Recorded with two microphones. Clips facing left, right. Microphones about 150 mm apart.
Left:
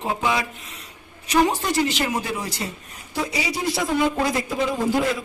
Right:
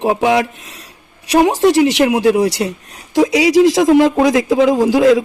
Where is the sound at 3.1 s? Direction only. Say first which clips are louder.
Right 16 dB; 90° right.